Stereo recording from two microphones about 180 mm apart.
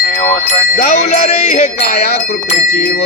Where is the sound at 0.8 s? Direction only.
55° left (ahead or behind).